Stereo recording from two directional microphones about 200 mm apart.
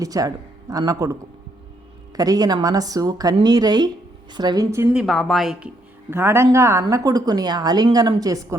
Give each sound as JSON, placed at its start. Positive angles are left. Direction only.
{"t": 0.0, "sound": "speech", "side_deg": -20}
{"t": 2.1, "sound": "a woman's voice", "side_deg": -20}
{"t": 5.0, "sound": "speech", "side_deg": 0}